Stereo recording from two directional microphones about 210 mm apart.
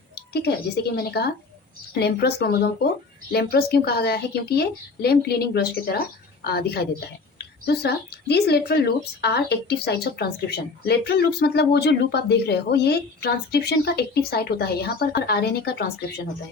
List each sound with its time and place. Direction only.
0.3 s a woman's voice: 50° left (ahead or behind)